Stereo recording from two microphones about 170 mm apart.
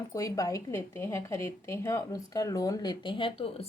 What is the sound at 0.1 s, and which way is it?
A woman's voice, 20° left (ahead or behind).